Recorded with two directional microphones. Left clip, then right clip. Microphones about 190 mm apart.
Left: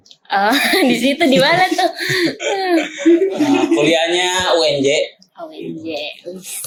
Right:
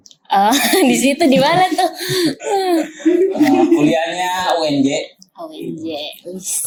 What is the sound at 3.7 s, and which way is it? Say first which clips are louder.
Speech: left 1 dB; 40° left (ahead or behind).